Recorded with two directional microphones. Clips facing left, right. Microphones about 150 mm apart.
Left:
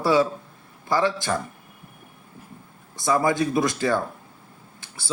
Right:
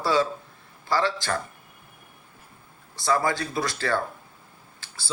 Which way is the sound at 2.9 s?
15° left (ahead or behind).